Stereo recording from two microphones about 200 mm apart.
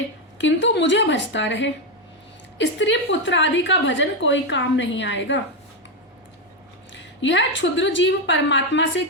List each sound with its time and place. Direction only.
0.3 s a woman's voice: 65° left (ahead or behind)
6.9 s a woman's voice: 65° left (ahead or behind)